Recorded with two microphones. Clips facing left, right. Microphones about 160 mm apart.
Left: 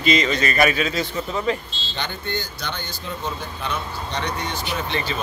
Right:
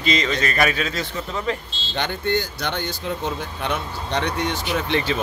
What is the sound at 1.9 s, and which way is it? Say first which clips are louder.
Speech: right 6 dB; 65° right (ahead or behind).